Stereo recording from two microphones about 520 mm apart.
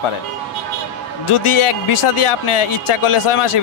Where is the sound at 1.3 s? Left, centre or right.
Left.